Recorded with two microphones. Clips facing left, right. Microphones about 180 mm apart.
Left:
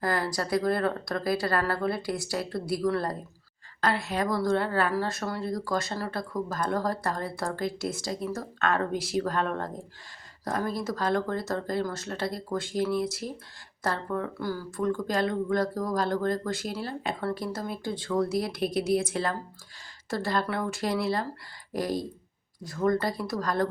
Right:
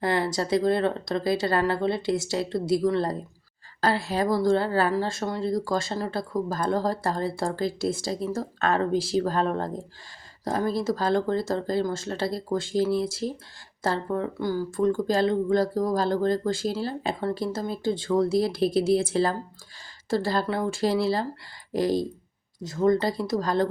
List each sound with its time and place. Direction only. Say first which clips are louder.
0.0 s a woman's voice: right 4 dB; 25° right (ahead or behind)